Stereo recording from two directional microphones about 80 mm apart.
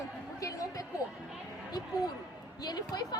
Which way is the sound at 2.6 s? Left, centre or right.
Left.